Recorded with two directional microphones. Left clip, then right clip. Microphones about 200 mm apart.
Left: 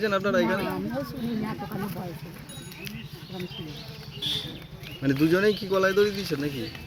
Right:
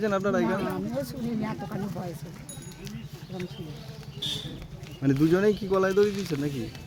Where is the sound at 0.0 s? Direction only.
55° right (ahead or behind).